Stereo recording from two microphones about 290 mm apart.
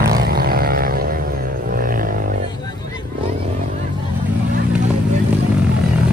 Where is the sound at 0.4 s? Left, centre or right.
Right.